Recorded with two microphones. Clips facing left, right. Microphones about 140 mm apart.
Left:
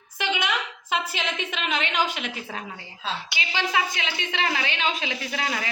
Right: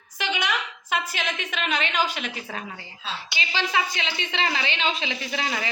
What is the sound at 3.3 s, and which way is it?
Speech, 10° left (ahead or behind).